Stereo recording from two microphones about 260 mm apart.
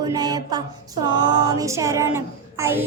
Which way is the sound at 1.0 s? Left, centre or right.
Centre.